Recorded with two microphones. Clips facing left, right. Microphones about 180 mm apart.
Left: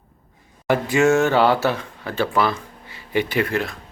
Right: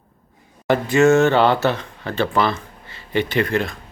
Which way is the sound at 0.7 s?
10° left (ahead or behind).